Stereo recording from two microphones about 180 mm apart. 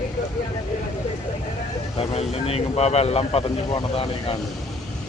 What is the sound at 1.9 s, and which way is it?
Speech, 35° left (ahead or behind).